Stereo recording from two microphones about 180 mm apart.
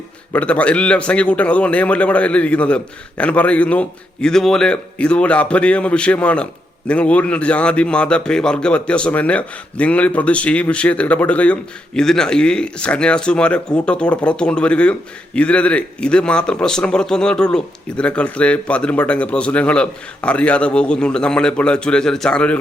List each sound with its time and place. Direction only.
0.3 s a man's voice: 5° left (ahead or behind)